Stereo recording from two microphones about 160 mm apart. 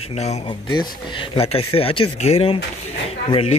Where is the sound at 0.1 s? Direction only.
40° left (ahead or behind).